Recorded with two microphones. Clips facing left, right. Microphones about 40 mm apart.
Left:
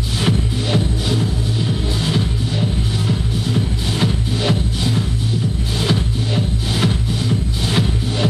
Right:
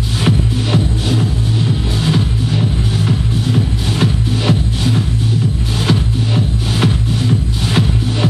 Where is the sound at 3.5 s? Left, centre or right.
Right.